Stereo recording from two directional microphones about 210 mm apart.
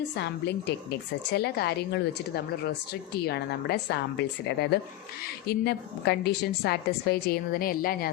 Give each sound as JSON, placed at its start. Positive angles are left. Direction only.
{"t": 0.2, "sound": "a woman's voice", "side_deg": 55}